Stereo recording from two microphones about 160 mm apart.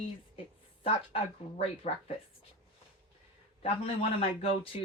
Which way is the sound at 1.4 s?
45° left (ahead or behind).